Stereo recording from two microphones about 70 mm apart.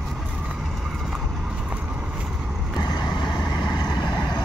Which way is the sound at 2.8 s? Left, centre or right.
Left.